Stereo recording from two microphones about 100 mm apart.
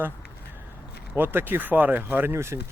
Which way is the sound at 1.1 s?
20° right (ahead or behind).